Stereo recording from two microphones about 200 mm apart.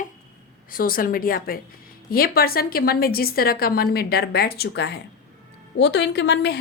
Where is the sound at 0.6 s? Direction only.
45° left (ahead or behind).